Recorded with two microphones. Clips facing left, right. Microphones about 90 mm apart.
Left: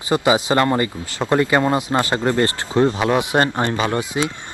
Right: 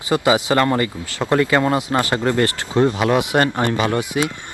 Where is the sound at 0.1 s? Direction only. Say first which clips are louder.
Even; 20° left (ahead or behind).